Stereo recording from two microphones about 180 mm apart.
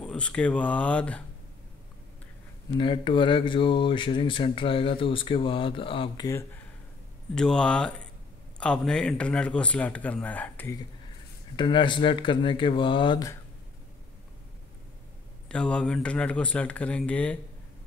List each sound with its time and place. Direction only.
0.0 s speech: 5° left (ahead or behind)
2.8 s speech: 25° left (ahead or behind)
7.3 s a man's voice: 5° left (ahead or behind)
11.5 s speech: 25° left (ahead or behind)
15.4 s speech: 5° left (ahead or behind)